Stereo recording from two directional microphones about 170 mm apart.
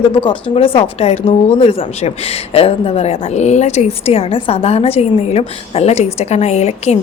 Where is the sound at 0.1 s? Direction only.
30° left (ahead or behind).